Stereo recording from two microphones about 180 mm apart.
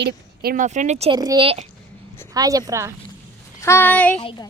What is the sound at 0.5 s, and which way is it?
Speech, 45° right (ahead or behind).